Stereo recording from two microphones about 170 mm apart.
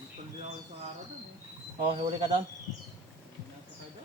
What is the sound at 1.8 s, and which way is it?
Speech, 35° right (ahead or behind).